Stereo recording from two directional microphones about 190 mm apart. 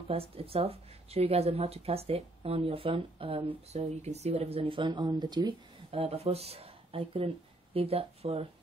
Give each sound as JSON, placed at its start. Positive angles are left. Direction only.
{"t": 0.1, "sound": "speech", "side_deg": -30}